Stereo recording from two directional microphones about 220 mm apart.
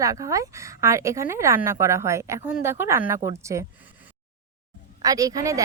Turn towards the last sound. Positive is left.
turn(degrees=-15)  # may be behind; listen again after turning